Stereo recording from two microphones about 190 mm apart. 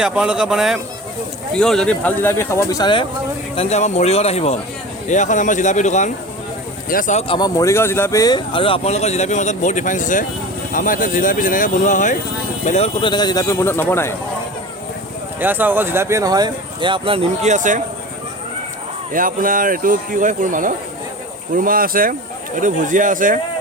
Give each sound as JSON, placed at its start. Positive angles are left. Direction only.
{"t": 0.0, "sound": "speech", "side_deg": -5}
{"t": 7.3, "sound": "speech", "side_deg": 20}
{"t": 15.4, "sound": "speech", "side_deg": -10}
{"t": 19.1, "sound": "speech", "side_deg": -45}